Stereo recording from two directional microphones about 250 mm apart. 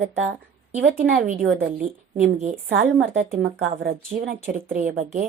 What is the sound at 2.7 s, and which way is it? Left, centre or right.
A woman's voice, right.